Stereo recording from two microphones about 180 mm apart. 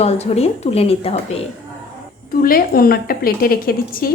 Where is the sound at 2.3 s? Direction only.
55° left (ahead or behind).